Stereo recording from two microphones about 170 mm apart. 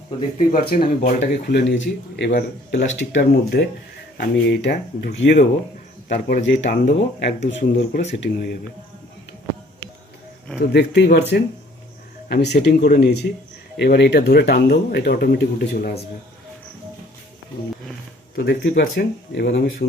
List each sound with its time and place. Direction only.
0.3 s speech: 60° left (ahead or behind)
1.2 s speech: 85° left
3.2 s speech: 70° left (ahead or behind)
4.2 s speech: 85° left
8.2 s speech: 70° left (ahead or behind)
10.6 s speech: 80° left
13.7 s speech: 80° left
18.3 s speech: 75° left (ahead or behind)
18.7 s speech: 65° left (ahead or behind); by 19.6 s 85° left